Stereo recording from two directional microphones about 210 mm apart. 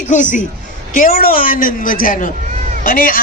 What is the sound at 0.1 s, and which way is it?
A woman's voice, 35° left (ahead or behind).